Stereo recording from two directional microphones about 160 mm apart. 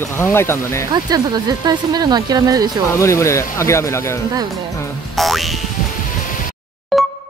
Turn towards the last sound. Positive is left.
turn(degrees=0)  # may be behind; listen again after turning